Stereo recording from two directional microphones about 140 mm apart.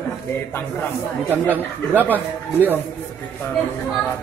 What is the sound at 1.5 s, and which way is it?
Speech, 10° right (ahead or behind).